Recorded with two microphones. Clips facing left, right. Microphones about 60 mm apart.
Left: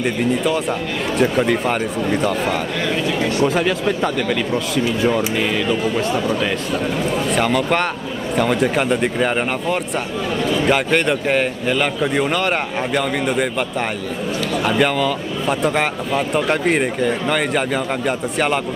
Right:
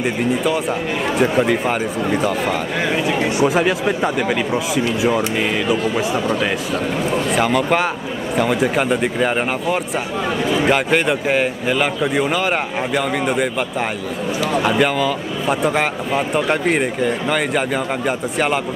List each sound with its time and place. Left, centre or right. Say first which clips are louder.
0.0 s a man's voice: even; centre
2.8 s a man's voice: right 3 dB; centre